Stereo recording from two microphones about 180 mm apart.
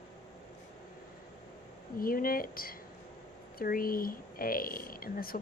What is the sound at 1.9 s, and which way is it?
Speech, 55° left (ahead or behind).